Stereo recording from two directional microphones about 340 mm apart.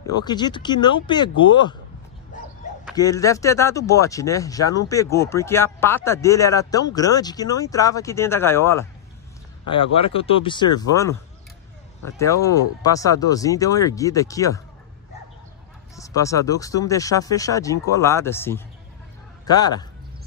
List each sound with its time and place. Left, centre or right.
0.0 s speech: centre
2.3 s dog: left
3.0 s speech: centre
16.0 s a man's voice: centre